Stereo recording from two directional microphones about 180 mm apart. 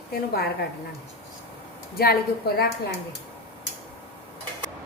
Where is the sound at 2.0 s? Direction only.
60° left (ahead or behind).